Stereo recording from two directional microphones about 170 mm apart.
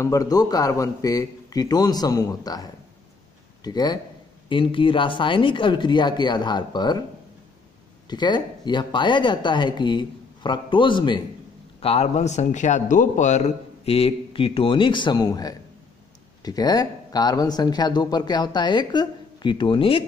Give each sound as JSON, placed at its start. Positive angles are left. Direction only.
{"t": 0.0, "sound": "speech", "side_deg": 20}
{"t": 8.1, "sound": "a man's voice", "side_deg": 25}